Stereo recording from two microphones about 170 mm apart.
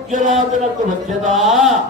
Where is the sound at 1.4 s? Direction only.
Centre (ahead or behind).